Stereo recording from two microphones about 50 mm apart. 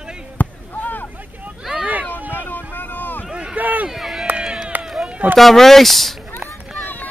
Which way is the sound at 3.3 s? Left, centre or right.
Right.